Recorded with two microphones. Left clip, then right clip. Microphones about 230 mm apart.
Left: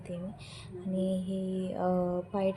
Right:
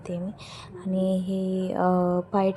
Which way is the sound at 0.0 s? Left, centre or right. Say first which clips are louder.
Right 7 dB; right.